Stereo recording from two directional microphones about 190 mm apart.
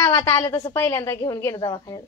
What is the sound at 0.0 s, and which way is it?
A woman's voice, 15° left (ahead or behind).